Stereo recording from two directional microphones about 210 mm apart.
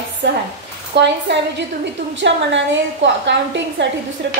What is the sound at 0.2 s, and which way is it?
A woman's voice, 55° right (ahead or behind).